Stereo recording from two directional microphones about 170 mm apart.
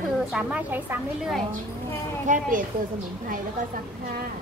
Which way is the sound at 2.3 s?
50° right (ahead or behind).